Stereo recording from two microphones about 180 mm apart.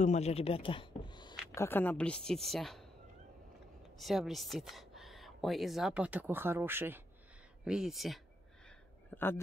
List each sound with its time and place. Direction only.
0.0 s speech: 35° left (ahead or behind)
1.5 s speech: 15° left (ahead or behind)
4.0 s speech: centre (ahead or behind)
9.1 s speech: 10° left (ahead or behind)